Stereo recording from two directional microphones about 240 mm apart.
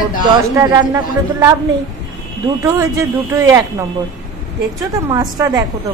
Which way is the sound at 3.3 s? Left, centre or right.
Centre.